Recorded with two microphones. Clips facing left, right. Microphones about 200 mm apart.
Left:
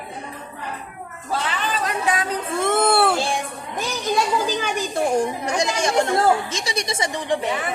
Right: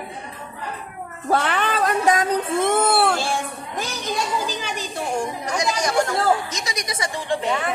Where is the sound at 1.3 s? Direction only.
60° right (ahead or behind).